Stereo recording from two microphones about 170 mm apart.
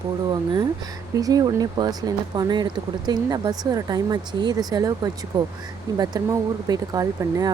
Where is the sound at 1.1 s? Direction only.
20° right (ahead or behind).